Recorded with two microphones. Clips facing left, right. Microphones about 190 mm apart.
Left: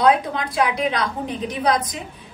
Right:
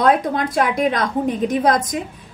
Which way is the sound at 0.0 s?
45° right (ahead or behind).